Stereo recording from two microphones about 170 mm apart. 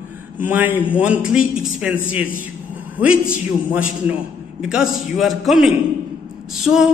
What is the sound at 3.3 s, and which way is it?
A man's voice, 10° right (ahead or behind).